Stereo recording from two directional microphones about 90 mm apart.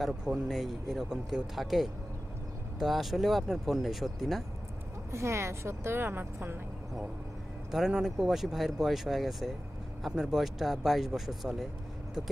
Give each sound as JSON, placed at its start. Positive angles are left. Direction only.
{"t": 0.0, "sound": "speech", "side_deg": -5}
{"t": 5.1, "sound": "a woman's voice", "side_deg": -30}
{"t": 7.7, "sound": "speech", "side_deg": -5}